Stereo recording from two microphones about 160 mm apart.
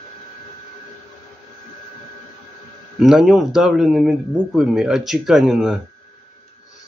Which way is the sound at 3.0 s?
Centre (ahead or behind).